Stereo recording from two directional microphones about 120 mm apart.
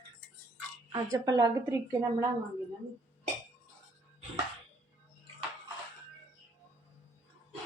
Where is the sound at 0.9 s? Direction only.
35° right (ahead or behind).